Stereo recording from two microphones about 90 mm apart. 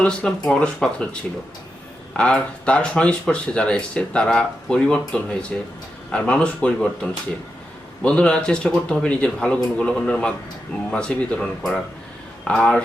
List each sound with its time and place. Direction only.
0.0 s speech: 10° left (ahead or behind)
2.1 s speech: 10° left (ahead or behind)